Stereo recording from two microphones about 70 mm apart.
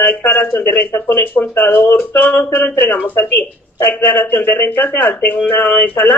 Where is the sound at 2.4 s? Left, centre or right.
Left.